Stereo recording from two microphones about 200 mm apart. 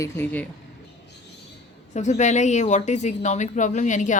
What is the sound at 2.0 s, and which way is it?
Speech, 35° left (ahead or behind).